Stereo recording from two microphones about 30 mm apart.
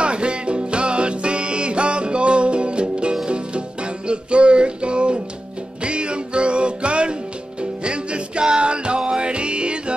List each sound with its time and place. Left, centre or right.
0.0 s music: right